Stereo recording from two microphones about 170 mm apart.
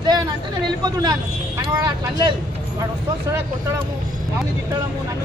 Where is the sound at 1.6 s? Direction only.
25° right (ahead or behind).